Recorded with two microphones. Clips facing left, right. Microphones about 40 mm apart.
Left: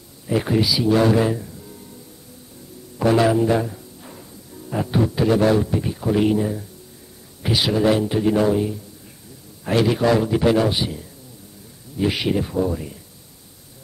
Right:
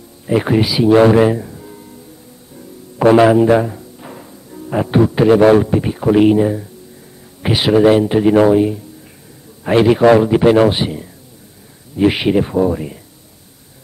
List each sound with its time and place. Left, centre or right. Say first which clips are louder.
0.3 s speech: right 5 dB; right
3.0 s a man's voice: right 8 dB; right